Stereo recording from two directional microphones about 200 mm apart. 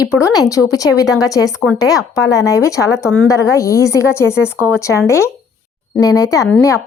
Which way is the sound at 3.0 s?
5° left (ahead or behind).